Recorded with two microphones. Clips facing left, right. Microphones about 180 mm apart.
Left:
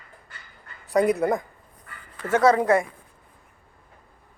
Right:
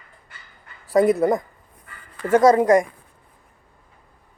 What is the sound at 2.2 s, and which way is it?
Speech, 10° right (ahead or behind).